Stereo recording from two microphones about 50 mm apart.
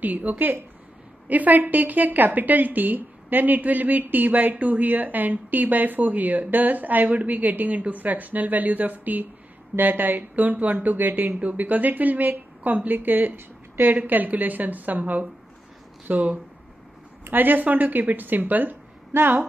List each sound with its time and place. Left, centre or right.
0.0 s a woman's voice: right
19.1 s a woman's voice: right